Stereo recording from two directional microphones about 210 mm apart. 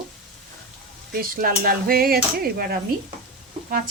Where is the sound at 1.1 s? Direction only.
40° right (ahead or behind).